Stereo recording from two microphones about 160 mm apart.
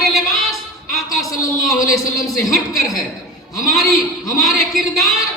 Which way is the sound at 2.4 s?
20° left (ahead or behind).